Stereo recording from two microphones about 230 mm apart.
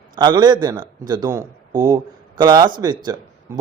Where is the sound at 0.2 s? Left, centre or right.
Centre.